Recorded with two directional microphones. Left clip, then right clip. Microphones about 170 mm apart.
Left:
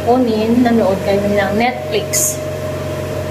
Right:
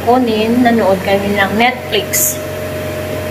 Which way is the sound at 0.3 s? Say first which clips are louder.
Right 2 dB; centre (ahead or behind).